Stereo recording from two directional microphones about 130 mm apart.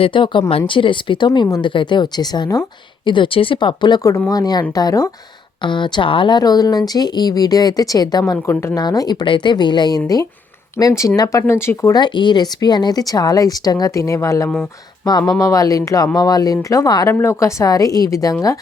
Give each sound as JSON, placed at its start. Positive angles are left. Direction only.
{"t": 0.0, "sound": "speech", "side_deg": 40}
{"t": 3.1, "sound": "speech", "side_deg": 40}
{"t": 5.6, "sound": "speech", "side_deg": 40}
{"t": 11.9, "sound": "speech", "side_deg": 35}